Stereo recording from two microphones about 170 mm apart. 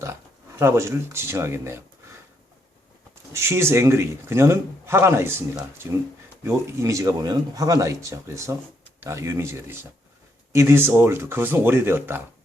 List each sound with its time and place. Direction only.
0.0 s speech: 15° right (ahead or behind)
3.3 s speech: 15° right (ahead or behind)
6.4 s speech: 15° right (ahead or behind)